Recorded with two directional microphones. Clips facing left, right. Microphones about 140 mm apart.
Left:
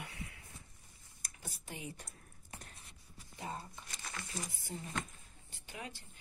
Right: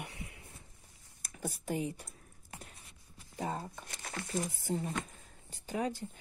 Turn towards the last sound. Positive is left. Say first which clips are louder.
# right 13 dB
turn(degrees=-40)  # may be behind; listen again after turning